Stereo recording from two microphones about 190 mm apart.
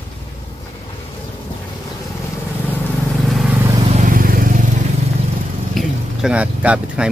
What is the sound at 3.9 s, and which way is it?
Vehicle, 45° right (ahead or behind).